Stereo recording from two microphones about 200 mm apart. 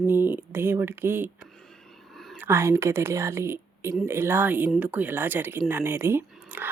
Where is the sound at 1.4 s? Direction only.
5° left (ahead or behind).